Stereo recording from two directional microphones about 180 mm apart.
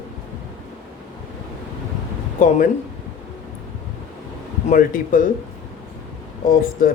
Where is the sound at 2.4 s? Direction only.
45° left (ahead or behind).